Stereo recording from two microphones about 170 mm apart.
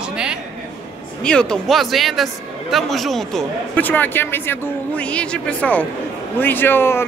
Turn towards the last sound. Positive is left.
turn(degrees=15)  # may be behind; listen again after turning